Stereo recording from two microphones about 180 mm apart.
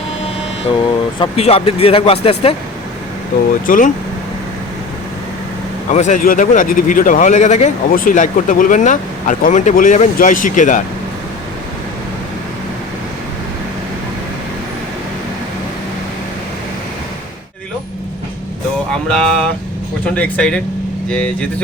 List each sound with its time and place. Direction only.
1.2 s speech: 30° left (ahead or behind)
3.7 s speech: 45° left (ahead or behind)
5.9 s speech: 40° left (ahead or behind)
18.9 s a sound: 5° left (ahead or behind)
20.1 s speech: 10° left (ahead or behind)